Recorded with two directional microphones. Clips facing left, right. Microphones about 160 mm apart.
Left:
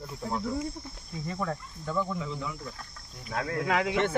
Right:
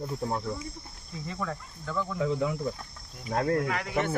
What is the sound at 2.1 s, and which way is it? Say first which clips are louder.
Speech: right 7 dB; 55° right (ahead or behind).